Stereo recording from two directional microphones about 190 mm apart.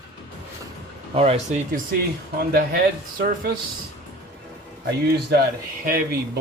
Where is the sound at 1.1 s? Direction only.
30° right (ahead or behind).